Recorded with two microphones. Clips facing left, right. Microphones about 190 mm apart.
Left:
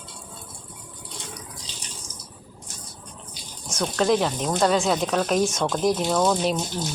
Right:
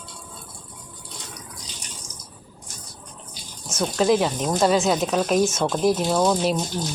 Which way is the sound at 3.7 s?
5° right (ahead or behind).